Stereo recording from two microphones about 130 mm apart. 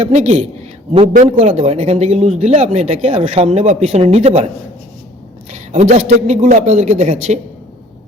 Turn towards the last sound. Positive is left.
turn(degrees=-60)  # may be behind; listen again after turning